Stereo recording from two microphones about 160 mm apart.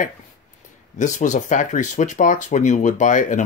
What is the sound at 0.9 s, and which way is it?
Speech, 50° left (ahead or behind).